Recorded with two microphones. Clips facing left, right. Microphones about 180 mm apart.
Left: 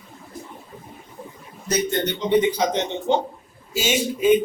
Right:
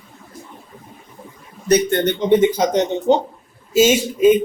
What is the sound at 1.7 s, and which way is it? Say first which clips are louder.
Speech: right 7 dB; 55° right (ahead or behind).